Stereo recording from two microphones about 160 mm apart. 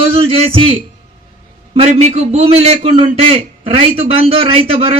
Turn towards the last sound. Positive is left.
turn(degrees=-35)  # may be behind; listen again after turning